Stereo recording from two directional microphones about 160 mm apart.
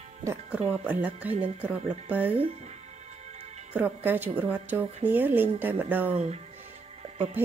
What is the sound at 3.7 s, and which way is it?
Speech, 10° right (ahead or behind).